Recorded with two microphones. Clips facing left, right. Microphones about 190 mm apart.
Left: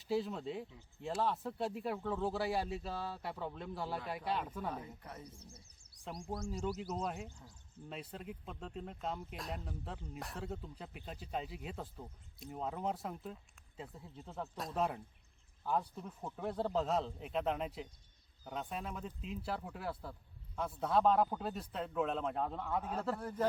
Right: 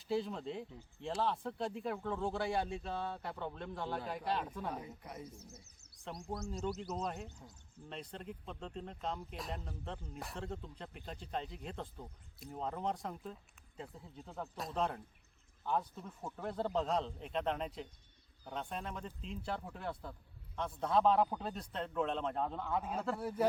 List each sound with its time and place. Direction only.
0.0 s speech: centre (ahead or behind)
5.0 s speech: 15° right (ahead or behind)
6.2 s speech: centre (ahead or behind)
7.3 s speech: 20° right (ahead or behind)
7.9 s speech: 5° left (ahead or behind)